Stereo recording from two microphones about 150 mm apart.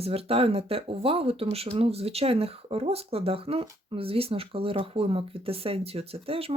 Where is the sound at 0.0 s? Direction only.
40° right (ahead or behind).